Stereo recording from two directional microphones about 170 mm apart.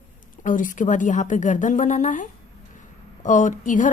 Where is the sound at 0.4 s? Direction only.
50° left (ahead or behind).